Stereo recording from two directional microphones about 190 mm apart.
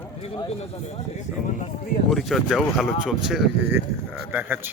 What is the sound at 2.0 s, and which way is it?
A man's voice, centre (ahead or behind).